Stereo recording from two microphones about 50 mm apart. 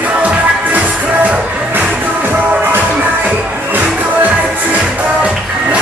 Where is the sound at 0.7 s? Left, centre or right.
Right.